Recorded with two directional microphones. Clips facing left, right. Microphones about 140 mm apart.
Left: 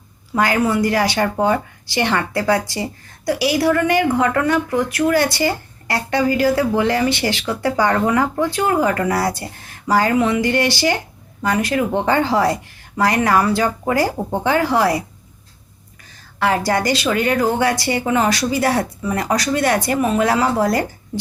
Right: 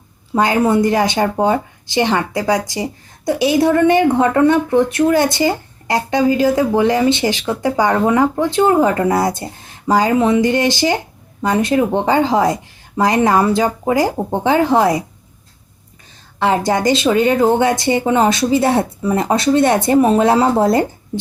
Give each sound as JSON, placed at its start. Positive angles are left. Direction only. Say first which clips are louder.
{"t": 0.3, "sound": "speech", "louder": "right 3 dB", "side_deg": -20}
{"t": 16.4, "sound": "speech", "louder": "right 3 dB", "side_deg": -20}